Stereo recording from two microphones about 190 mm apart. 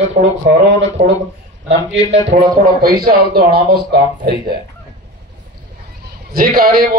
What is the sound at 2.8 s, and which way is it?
A man's voice, 50° right (ahead or behind).